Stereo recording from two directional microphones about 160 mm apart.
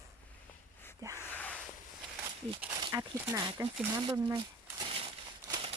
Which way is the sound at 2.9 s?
20° right (ahead or behind).